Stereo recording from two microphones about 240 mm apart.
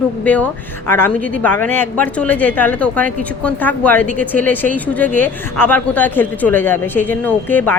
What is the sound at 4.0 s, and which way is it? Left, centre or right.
Speech, right.